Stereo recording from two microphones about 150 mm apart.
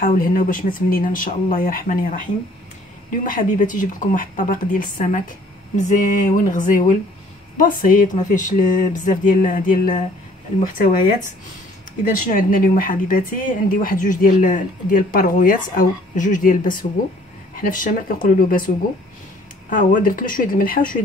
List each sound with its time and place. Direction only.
0.0 s speech: 65° left (ahead or behind)
3.3 s speech: 60° left (ahead or behind)
19.7 s speech: 60° left (ahead or behind)